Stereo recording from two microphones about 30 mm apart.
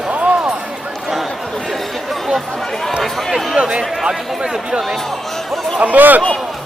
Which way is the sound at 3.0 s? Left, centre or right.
Centre.